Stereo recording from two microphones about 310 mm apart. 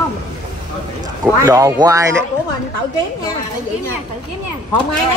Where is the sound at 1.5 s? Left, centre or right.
Centre.